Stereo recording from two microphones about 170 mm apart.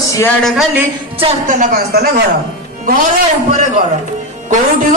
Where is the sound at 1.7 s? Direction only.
70° right (ahead or behind).